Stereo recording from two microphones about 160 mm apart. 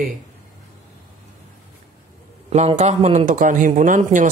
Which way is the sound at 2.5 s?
45° right (ahead or behind).